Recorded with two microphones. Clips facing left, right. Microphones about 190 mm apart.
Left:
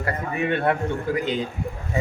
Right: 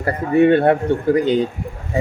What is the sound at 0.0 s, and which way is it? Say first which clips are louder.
A man's voice: right 11 dB; 35° right (ahead or behind).